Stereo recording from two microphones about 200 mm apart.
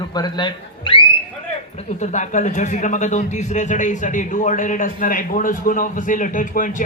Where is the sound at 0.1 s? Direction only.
20° left (ahead or behind).